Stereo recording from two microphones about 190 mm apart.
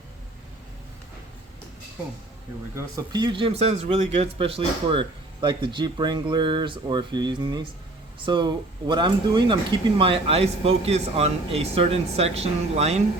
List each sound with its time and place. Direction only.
2.7 s speech: 20° right (ahead or behind)